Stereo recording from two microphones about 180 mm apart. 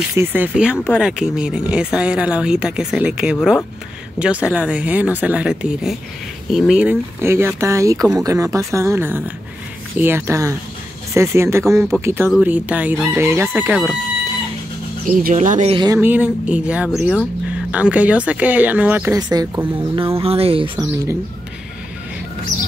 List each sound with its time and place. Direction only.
0.1 s speech: 10° right (ahead or behind)
15.0 s speech: 45° right (ahead or behind)
15.7 s speech: 25° right (ahead or behind)
16.0 s speech: 10° right (ahead or behind)
19.1 s speech: 20° right (ahead or behind)
20.2 s speech: 35° right (ahead or behind)